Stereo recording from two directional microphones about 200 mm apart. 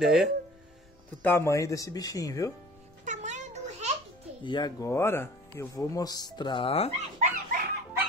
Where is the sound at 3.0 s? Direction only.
35° right (ahead or behind).